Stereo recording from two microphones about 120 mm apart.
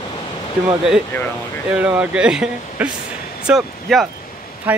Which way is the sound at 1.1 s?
15° left (ahead or behind).